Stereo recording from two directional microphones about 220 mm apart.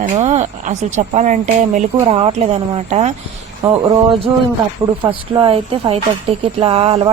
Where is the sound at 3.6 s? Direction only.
10° right (ahead or behind).